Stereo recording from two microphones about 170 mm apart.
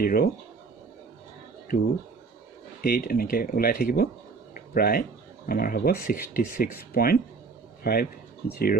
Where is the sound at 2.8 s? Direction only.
60° left (ahead or behind).